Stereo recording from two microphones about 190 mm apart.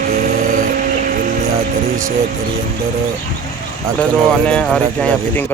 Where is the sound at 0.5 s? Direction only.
45° right (ahead or behind).